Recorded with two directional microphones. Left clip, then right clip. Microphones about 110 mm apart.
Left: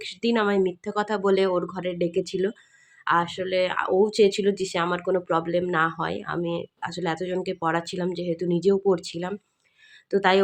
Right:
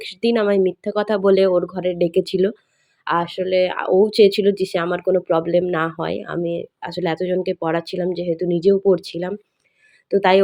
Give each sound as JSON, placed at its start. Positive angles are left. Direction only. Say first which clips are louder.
{"t": 0.0, "sound": "speech", "louder": "right 5 dB", "side_deg": -25}
{"t": 3.0, "sound": "speech", "louder": "right 3 dB", "side_deg": -25}
{"t": 4.1, "sound": "speech", "louder": "right 6 dB", "side_deg": -35}